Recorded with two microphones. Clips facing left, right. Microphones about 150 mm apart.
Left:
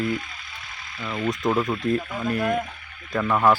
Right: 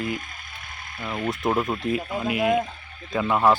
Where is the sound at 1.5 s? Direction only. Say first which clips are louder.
Left 1 dB; 25° right (ahead or behind).